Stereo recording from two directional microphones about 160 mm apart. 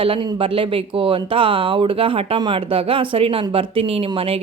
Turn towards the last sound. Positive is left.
turn(degrees=-35)  # may be behind; listen again after turning